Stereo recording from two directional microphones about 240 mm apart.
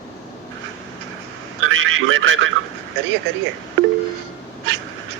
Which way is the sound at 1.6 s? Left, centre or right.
Right.